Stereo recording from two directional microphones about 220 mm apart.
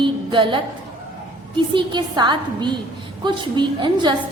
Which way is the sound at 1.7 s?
20° right (ahead or behind).